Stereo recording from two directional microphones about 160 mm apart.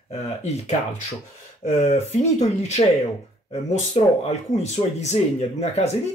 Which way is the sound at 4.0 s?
40° left (ahead or behind).